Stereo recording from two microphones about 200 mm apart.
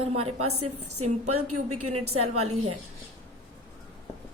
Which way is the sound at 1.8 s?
90° right.